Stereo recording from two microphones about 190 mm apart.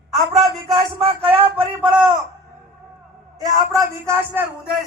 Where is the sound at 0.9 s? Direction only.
30° right (ahead or behind).